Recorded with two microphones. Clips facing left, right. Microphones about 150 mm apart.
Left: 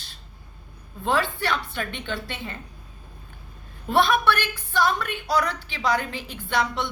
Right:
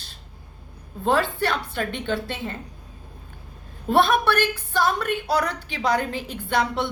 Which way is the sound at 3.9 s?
45° right (ahead or behind).